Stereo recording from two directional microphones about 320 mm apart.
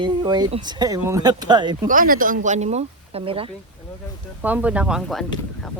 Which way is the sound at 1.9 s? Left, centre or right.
Right.